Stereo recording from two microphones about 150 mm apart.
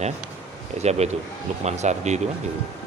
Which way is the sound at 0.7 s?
45° right (ahead or behind).